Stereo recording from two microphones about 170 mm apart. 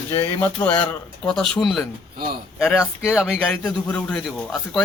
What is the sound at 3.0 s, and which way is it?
A man's voice, 5° right (ahead or behind).